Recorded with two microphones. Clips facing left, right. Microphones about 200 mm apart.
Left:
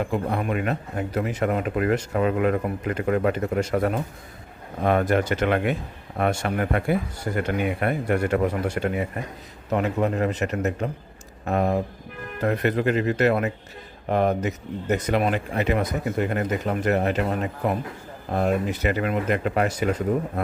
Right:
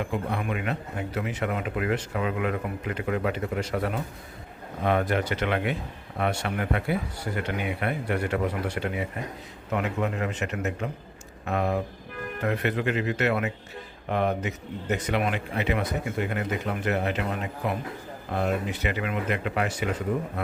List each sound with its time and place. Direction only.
0.0 s speech: 40° left (ahead or behind)